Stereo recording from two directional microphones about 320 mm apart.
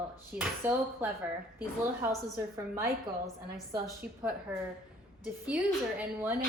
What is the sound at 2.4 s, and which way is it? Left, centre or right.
A woman's voice, centre.